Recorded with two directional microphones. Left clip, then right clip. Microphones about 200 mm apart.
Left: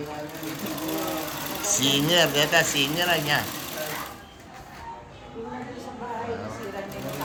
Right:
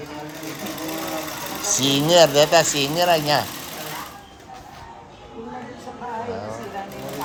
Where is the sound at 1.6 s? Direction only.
20° right (ahead or behind).